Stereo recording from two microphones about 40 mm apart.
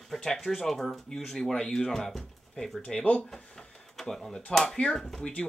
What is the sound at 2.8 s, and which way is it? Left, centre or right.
Speech, left.